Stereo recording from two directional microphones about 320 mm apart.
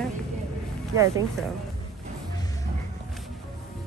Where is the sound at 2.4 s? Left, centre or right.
Centre.